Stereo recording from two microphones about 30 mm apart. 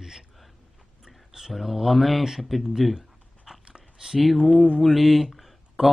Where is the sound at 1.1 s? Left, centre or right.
Centre.